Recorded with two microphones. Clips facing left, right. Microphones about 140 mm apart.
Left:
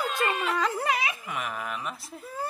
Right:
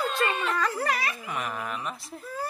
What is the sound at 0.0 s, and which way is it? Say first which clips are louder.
Speech: right 1 dB; 5° left (ahead or behind).